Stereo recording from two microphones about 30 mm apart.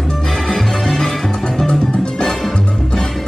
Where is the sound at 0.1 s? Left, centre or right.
Left.